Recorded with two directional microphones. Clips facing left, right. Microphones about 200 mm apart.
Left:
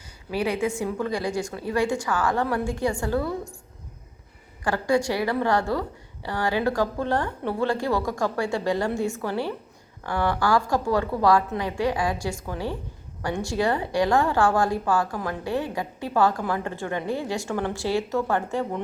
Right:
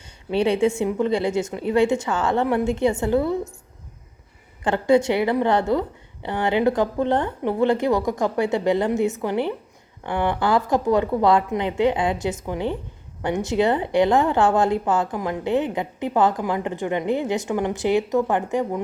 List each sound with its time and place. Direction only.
0.3 s a woman's voice: 25° right (ahead or behind)
4.6 s a woman's voice: 20° right (ahead or behind)